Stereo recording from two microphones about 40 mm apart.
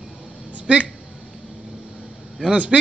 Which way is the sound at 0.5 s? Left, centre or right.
Right.